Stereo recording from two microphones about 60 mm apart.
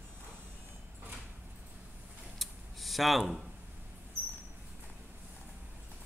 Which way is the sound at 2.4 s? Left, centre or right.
Centre.